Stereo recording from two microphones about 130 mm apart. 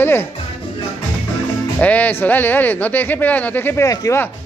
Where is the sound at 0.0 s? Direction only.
15° left (ahead or behind).